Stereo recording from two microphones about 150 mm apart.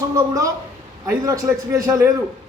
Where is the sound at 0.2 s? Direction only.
20° right (ahead or behind).